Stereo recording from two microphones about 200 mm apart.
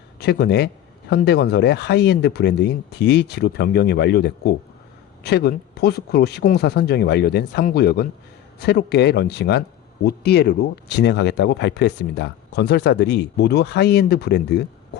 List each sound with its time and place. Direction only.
0.2 s speech: 55° left (ahead or behind)